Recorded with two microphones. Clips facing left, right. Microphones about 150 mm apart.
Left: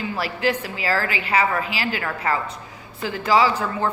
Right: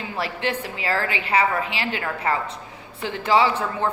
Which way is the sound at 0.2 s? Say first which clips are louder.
Left 2 dB; 30° right (ahead or behind).